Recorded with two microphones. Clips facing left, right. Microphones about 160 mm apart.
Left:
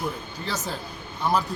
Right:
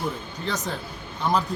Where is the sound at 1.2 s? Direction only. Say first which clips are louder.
Even; 10° left (ahead or behind).